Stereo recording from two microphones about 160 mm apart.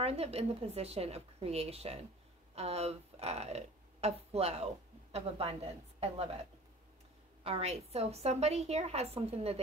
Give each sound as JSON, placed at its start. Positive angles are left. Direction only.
{"t": 0.0, "sound": "a woman's voice", "side_deg": -40}
{"t": 7.4, "sound": "a woman's voice", "side_deg": -40}